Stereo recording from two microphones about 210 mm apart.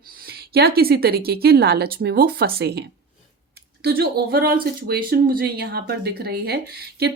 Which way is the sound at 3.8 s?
45° right (ahead or behind).